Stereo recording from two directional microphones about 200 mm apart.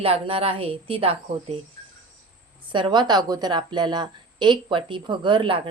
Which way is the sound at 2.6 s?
25° right (ahead or behind).